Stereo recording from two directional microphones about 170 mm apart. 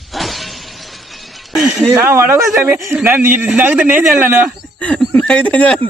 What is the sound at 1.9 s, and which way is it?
A man's voice, 15° right (ahead or behind).